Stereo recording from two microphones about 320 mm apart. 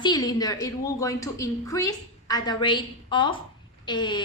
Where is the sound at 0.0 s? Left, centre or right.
Centre.